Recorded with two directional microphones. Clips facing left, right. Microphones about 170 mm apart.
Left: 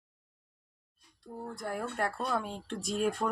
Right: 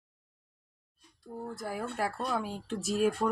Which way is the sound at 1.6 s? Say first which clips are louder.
Even; 5° right (ahead or behind).